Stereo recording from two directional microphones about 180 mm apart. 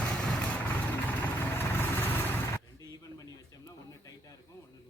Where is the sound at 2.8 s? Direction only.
20° left (ahead or behind).